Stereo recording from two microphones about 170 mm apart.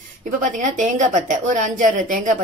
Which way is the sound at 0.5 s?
50° right (ahead or behind).